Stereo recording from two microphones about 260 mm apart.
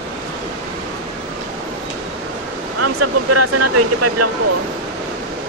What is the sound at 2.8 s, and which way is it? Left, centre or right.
Speech, right.